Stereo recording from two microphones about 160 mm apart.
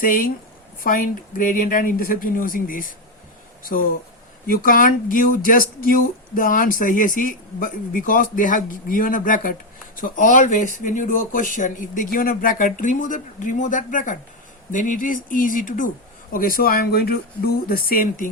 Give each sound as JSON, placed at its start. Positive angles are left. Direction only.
{"t": 0.0, "sound": "speech", "side_deg": 65}